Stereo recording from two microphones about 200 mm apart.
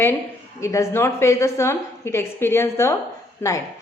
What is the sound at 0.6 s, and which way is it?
A woman's voice, 15° left (ahead or behind).